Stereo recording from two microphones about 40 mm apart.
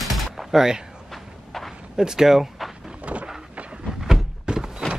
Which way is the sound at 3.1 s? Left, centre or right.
Right.